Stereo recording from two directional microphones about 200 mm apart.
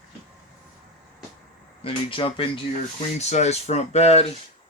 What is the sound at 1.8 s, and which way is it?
Speech, 25° left (ahead or behind).